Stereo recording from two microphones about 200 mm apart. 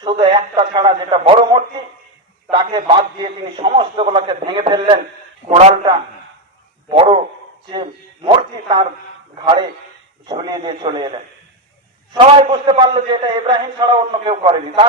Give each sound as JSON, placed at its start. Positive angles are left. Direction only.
{"t": 0.0, "sound": "a man's voice", "side_deg": -25}
{"t": 2.7, "sound": "a man's voice", "side_deg": -25}
{"t": 6.8, "sound": "a sound", "side_deg": -25}
{"t": 9.3, "sound": "radio", "side_deg": -25}
{"t": 10.2, "sound": "a man's voice", "side_deg": -20}
{"t": 12.1, "sound": "a man's voice", "side_deg": -25}